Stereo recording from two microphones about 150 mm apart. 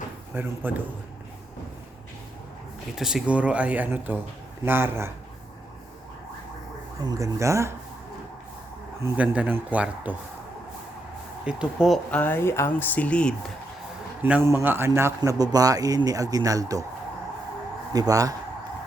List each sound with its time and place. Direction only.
0.3 s speech: 15° right (ahead or behind)
2.9 s speech: 5° right (ahead or behind)
7.0 s a man's voice: 20° right (ahead or behind)
9.0 s speech: 15° right (ahead or behind)
11.4 s speech: 5° right (ahead or behind)
12.1 s speech: 10° left (ahead or behind)
14.2 s a man's voice: 10° right (ahead or behind)
17.9 s a man's voice: 25° right (ahead or behind)